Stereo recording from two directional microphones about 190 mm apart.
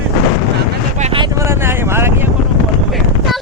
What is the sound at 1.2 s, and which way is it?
Vehicle, 15° right (ahead or behind).